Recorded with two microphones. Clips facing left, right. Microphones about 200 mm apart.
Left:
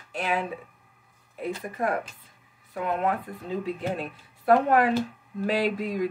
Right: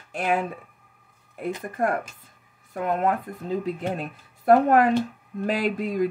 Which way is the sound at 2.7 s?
45° right (ahead or behind).